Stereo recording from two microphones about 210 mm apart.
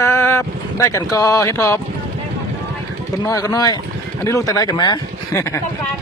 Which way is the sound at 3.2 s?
15° left (ahead or behind).